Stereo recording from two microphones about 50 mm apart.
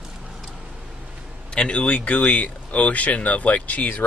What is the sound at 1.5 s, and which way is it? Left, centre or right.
Speech, left.